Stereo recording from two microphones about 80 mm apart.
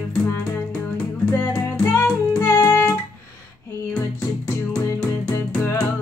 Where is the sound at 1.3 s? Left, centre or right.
Left.